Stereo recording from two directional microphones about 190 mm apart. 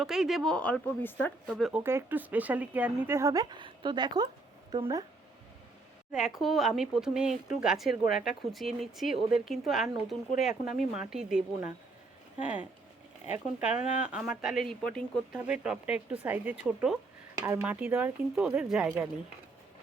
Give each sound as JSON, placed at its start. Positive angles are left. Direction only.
{"t": 0.0, "sound": "speech", "side_deg": 0}
{"t": 1.5, "sound": "speech", "side_deg": 0}
{"t": 1.8, "sound": "speech", "side_deg": -15}
{"t": 6.1, "sound": "speech", "side_deg": 0}
{"t": 14.0, "sound": "speech", "side_deg": -5}